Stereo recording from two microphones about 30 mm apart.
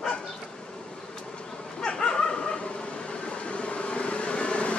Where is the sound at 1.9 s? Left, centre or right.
Left.